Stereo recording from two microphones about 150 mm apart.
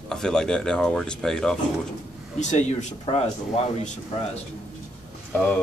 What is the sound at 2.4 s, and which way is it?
Speech, 50° left (ahead or behind).